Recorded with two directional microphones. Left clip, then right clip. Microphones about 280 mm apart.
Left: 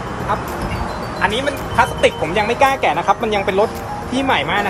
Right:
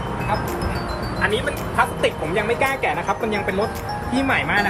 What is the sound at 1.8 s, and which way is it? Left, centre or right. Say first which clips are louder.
Speech: left 5 dB; left.